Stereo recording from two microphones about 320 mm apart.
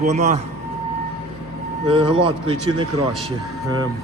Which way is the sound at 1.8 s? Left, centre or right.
Centre.